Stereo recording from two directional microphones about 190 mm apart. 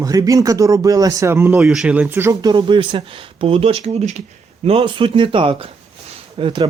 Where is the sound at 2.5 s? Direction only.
25° right (ahead or behind).